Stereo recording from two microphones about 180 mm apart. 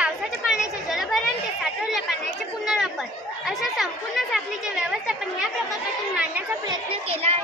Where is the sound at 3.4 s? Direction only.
Centre (ahead or behind).